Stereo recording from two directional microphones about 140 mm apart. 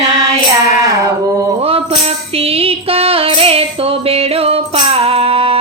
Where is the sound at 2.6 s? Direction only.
45° right (ahead or behind).